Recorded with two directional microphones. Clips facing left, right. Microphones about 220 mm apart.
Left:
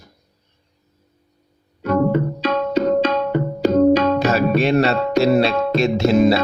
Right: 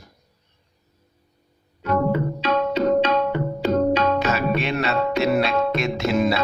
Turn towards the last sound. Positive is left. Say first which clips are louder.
# left 6 dB
turn(degrees=35)  # may be behind; listen again after turning